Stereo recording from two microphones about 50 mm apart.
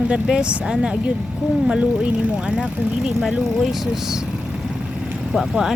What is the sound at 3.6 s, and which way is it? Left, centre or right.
Speech, centre.